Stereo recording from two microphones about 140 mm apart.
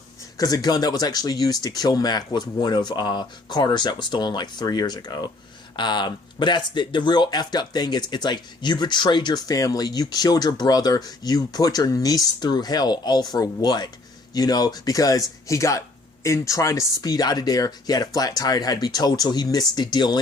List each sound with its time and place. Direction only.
0.3 s speech: 25° left (ahead or behind)